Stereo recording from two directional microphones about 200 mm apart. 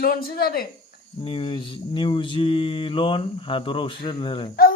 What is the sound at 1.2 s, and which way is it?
Mantra, 25° left (ahead or behind).